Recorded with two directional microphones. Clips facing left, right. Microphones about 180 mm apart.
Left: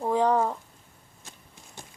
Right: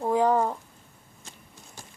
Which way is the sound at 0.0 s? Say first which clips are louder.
Right 1 dB; 5° right (ahead or behind).